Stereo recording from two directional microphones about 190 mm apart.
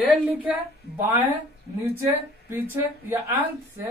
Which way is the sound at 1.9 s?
10° right (ahead or behind).